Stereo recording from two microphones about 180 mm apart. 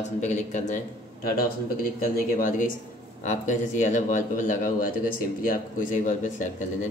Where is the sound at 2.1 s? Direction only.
50° left (ahead or behind).